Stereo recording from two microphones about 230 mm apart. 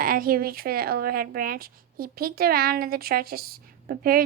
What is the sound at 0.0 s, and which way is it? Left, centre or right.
Speech, right.